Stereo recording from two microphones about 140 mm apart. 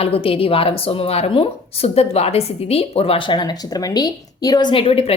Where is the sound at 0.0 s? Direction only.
40° left (ahead or behind); by 4.7 s 25° left (ahead or behind).